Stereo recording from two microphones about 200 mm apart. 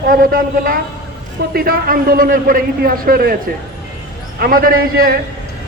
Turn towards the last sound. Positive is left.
turn(degrees=-50)  # may be behind; listen again after turning